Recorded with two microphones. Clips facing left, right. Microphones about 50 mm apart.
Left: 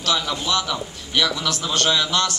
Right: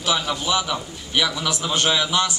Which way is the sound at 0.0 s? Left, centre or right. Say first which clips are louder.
Even; centre.